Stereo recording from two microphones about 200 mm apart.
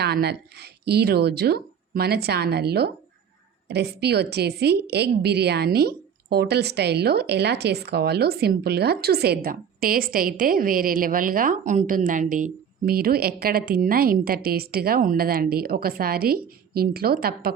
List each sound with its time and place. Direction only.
0.0 s a woman's voice: 55° right (ahead or behind)